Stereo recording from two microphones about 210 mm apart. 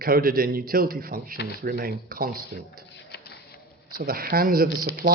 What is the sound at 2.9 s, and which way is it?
Printer, 55° left (ahead or behind).